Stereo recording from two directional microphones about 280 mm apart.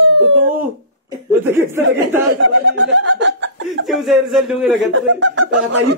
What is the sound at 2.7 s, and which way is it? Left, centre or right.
Chuckle, right.